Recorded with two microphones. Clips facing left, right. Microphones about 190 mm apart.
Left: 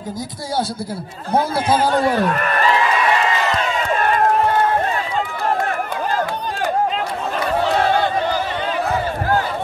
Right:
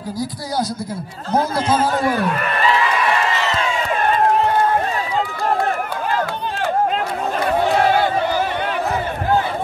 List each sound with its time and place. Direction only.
1.5 s a man's voice: 30° left (ahead or behind)